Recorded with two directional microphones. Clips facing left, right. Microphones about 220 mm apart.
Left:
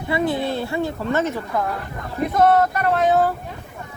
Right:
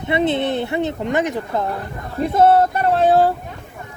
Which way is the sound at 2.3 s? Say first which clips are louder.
Right 3 dB; 30° right (ahead or behind).